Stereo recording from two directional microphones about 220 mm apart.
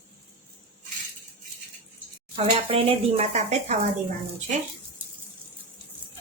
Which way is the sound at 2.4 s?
25° right (ahead or behind).